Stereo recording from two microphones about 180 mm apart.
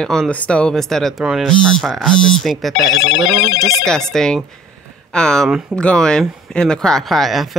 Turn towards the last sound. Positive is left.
turn(degrees=0)  # may be behind; listen again after turning